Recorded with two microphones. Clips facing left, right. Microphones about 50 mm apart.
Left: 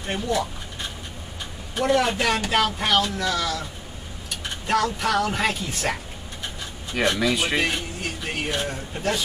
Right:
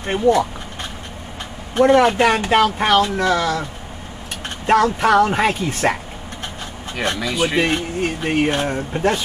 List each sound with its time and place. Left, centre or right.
0.0 s speech: right
1.8 s speech: right
4.6 s speech: right
7.2 s speech: centre
7.6 s speech: right